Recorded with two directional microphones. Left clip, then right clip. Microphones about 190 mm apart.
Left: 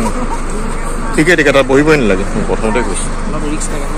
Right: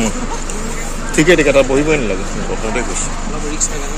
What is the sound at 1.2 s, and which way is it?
Speech, 10° left (ahead or behind).